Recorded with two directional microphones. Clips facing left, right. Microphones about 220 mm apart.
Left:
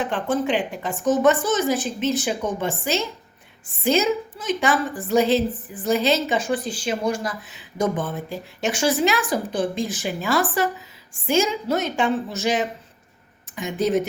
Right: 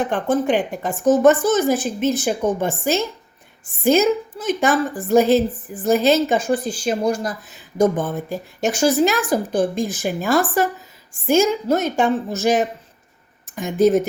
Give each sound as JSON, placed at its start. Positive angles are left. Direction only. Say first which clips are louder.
{"t": 0.0, "sound": "a woman's voice", "louder": "right 4 dB", "side_deg": -50}